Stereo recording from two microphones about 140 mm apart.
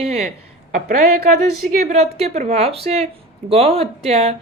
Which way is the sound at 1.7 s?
55° right (ahead or behind).